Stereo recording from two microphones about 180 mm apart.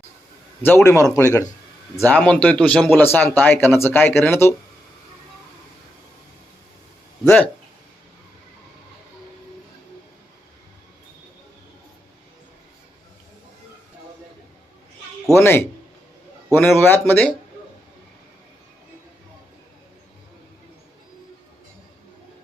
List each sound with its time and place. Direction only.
0.6 s speech: 10° left (ahead or behind)
15.4 s speech: 15° left (ahead or behind)